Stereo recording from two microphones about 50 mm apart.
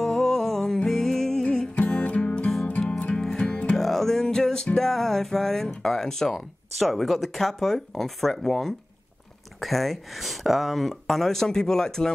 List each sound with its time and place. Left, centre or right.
0.0 s music: centre
1.4 s music: centre
5.8 s speech: centre
6.3 s speech: centre